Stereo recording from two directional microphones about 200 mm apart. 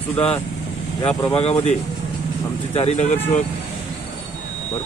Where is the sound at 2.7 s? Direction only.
30° left (ahead or behind).